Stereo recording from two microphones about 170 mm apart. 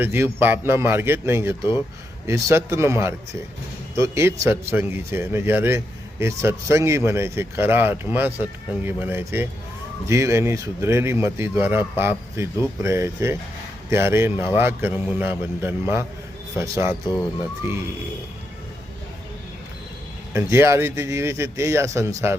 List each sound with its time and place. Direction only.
0.0 s speech: 10° right (ahead or behind)
20.3 s speech: 15° right (ahead or behind)